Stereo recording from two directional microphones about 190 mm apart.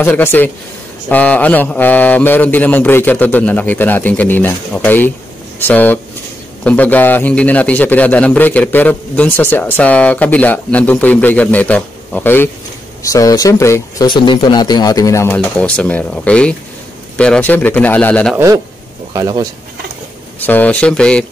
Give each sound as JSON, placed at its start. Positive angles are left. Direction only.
{"t": 0.0, "sound": "a man's voice", "side_deg": 10}
{"t": 19.1, "sound": "speech", "side_deg": -20}
{"t": 20.4, "sound": "speech", "side_deg": 10}